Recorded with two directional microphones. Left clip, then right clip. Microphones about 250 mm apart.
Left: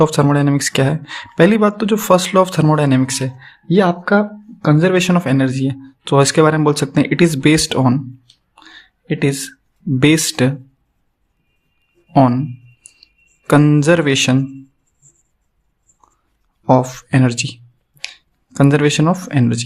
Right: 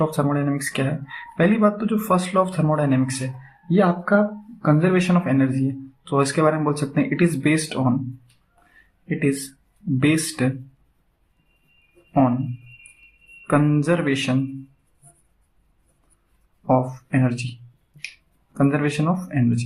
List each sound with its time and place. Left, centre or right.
0.0 s speech: left
9.0 s speech: left
13.5 s speech: left
16.6 s speech: left